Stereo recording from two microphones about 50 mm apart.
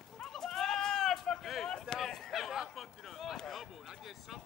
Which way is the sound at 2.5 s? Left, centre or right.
Centre.